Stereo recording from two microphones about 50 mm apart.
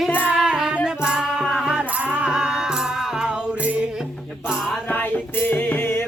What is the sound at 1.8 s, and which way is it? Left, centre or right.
Music, right.